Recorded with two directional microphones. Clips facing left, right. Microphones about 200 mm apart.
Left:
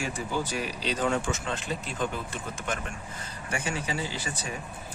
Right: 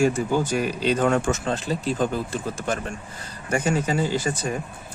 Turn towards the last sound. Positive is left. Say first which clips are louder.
# right 10 dB
turn(degrees=-45)  # may be behind; listen again after turning